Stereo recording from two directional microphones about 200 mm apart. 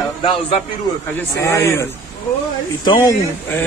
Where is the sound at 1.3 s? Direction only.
15° left (ahead or behind).